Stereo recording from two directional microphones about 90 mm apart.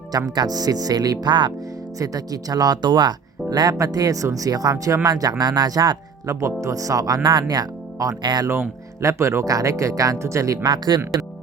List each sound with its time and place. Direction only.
0.1 s speech: 45° right (ahead or behind)
1.3 s speech: 60° right (ahead or behind)
2.0 s speech: 45° right (ahead or behind)
6.2 s speech: 35° right (ahead or behind); by 8.4 s 50° right (ahead or behind)
9.0 s speech: 35° right (ahead or behind)
10.7 s speech: 50° right (ahead or behind)